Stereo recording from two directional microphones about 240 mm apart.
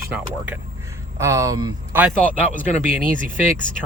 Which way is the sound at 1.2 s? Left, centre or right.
Centre.